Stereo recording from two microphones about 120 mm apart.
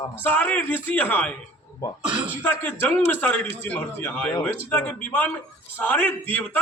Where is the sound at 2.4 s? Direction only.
15° left (ahead or behind).